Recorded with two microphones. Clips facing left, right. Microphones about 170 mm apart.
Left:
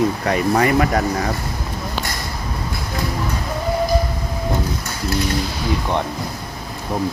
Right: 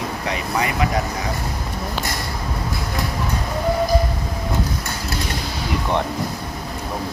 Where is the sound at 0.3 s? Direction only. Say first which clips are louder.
Left 5 dB; 50° left (ahead or behind).